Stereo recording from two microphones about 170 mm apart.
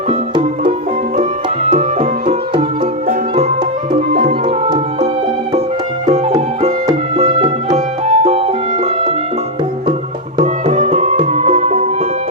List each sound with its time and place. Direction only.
4.1 s music: 60° right (ahead or behind)
4.4 s music: 35° right (ahead or behind)
7.2 s music: 35° right (ahead or behind)
10.4 s music: 45° right (ahead or behind)